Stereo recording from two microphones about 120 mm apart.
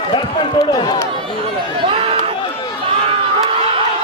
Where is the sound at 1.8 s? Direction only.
50° right (ahead or behind).